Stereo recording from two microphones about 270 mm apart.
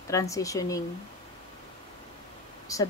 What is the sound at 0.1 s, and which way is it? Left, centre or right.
Speech, centre.